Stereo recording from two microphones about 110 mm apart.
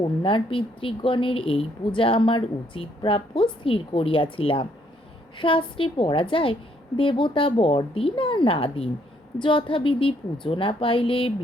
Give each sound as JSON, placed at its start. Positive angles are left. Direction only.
{"t": 0.0, "sound": "speech", "side_deg": 50}